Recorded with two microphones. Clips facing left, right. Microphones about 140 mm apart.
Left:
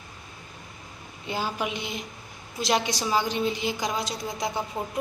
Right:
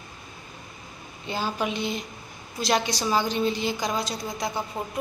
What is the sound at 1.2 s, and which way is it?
A woman's voice, 15° left (ahead or behind).